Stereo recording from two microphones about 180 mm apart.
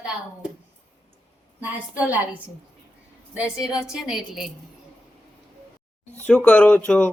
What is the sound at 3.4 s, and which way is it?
A woman's voice, 5° right (ahead or behind).